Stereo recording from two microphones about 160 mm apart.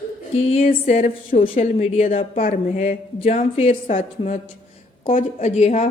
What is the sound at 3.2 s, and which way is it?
A woman's voice, 40° left (ahead or behind).